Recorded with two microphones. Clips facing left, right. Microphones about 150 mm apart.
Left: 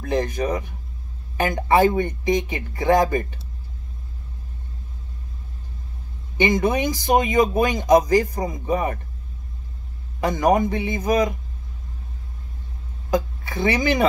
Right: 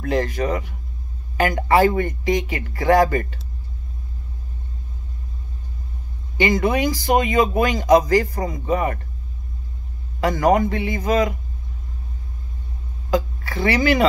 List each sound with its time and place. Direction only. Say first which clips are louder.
0.0 s a man's voice: right 1 dB; 20° left (ahead or behind)
6.3 s speech: right 1 dB; 20° left (ahead or behind)
10.2 s a man's voice: right 1 dB; 20° left (ahead or behind)
13.1 s speech: right 1 dB; 20° left (ahead or behind)